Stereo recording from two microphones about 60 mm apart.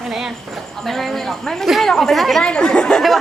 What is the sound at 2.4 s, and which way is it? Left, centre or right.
Speech, centre.